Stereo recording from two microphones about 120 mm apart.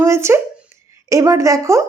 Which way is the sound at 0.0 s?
20° right (ahead or behind).